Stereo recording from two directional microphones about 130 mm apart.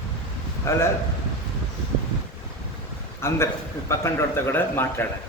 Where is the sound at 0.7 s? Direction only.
20° left (ahead or behind).